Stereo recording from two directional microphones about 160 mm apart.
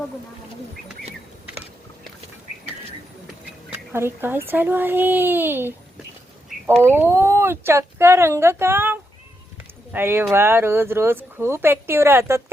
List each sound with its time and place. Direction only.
3.9 s speech: 15° right (ahead or behind)